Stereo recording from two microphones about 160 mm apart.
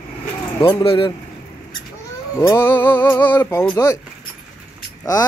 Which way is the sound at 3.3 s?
15° left (ahead or behind).